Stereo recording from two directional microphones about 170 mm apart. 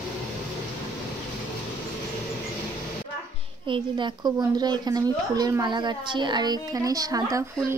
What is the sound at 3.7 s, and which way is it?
A woman's voice, 25° right (ahead or behind).